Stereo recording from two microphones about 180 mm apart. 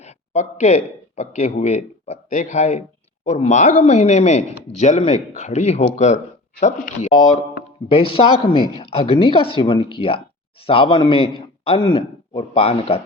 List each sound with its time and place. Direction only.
0.0 s speech: 40° left (ahead or behind)
7.6 s a sound: 60° left (ahead or behind)
7.9 s speech: 30° left (ahead or behind)